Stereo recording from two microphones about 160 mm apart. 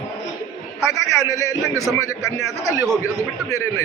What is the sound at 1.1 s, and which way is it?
A man's voice, 20° left (ahead or behind).